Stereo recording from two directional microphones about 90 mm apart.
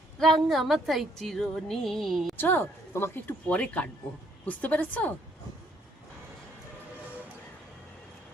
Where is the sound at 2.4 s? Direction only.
20° left (ahead or behind).